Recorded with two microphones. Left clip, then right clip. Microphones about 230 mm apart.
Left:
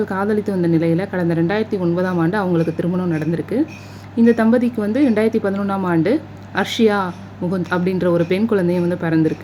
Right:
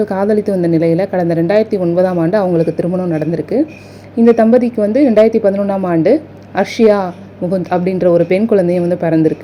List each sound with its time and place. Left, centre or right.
0.0 s a woman's voice: centre